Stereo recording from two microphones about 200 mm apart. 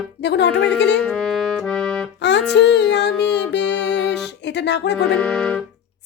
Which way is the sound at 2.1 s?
60° left (ahead or behind).